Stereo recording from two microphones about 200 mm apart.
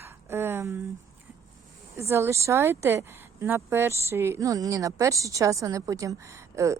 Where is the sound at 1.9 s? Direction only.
15° right (ahead or behind).